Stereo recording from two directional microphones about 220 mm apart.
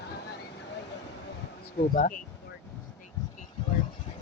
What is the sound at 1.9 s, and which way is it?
Speech, 40° left (ahead or behind).